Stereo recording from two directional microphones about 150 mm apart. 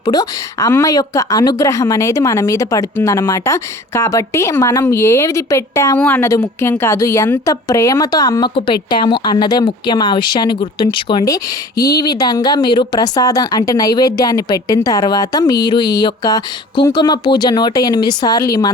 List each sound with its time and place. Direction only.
0.0 s a woman's voice: 25° left (ahead or behind)